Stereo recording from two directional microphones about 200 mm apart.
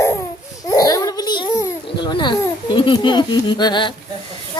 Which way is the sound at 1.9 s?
25° left (ahead or behind).